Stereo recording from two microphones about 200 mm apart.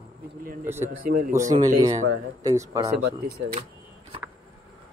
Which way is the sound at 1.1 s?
45° right (ahead or behind).